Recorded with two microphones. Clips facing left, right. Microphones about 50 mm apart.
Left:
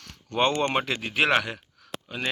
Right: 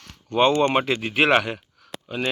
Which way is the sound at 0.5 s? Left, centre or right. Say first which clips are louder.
Right 5 dB; right.